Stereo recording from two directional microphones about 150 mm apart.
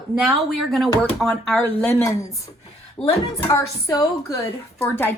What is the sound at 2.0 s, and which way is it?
A woman's voice, 20° left (ahead or behind).